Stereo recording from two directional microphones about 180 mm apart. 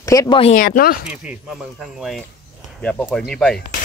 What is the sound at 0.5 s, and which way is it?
Speech, 55° left (ahead or behind).